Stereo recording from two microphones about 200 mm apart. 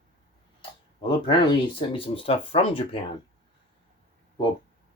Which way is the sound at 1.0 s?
25° left (ahead or behind).